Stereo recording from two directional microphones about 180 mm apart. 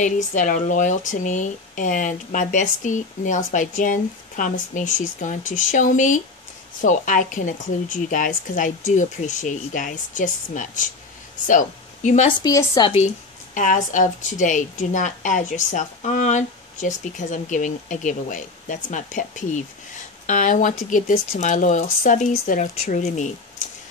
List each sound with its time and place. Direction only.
0.0 s speech: 45° left (ahead or behind)
12.3 s a woman's voice: 20° left (ahead or behind)
13.6 s speech: 45° left (ahead or behind)